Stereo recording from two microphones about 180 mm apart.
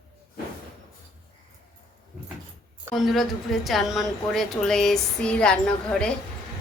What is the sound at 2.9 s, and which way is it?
A woman's voice, centre (ahead or behind).